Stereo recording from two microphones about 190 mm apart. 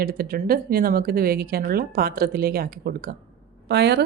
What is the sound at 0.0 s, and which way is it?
Speech, 50° right (ahead or behind).